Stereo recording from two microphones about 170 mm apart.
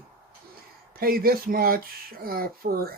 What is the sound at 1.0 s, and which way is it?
Speech, 60° right (ahead or behind).